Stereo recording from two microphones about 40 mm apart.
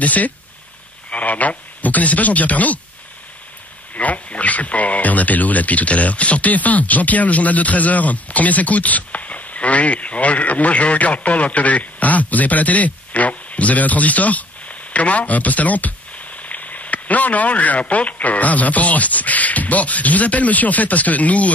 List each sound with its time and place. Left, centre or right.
0.0 s speech: left
3.9 s speech: left